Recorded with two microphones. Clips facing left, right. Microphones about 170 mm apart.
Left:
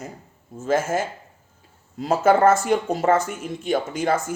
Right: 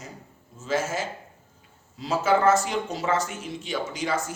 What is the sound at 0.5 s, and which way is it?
Speech, 50° left (ahead or behind).